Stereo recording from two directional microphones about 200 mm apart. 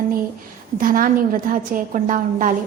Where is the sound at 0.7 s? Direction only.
45° right (ahead or behind).